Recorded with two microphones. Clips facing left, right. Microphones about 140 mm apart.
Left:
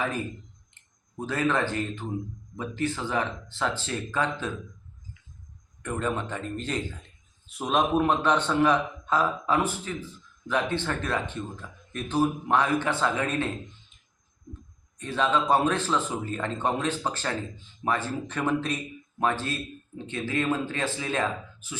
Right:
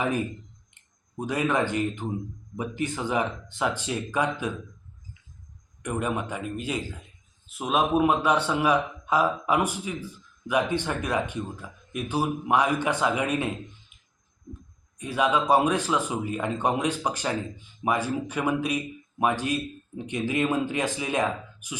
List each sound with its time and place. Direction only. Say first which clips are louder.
0.0 s a man's voice: right 3 dB; 15° right (ahead or behind)
5.8 s a man's voice: right 1 dB; 15° right (ahead or behind)
13.9 s a sound: even; 10° right (ahead or behind)
14.9 s a man's voice: right 1 dB; 10° right (ahead or behind)